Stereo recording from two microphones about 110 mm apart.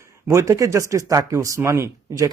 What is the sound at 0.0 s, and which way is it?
Speech, 30° right (ahead or behind).